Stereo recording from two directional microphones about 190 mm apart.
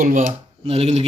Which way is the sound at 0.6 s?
30° right (ahead or behind).